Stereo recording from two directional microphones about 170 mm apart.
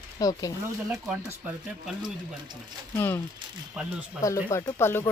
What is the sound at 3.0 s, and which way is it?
Speech, 15° left (ahead or behind).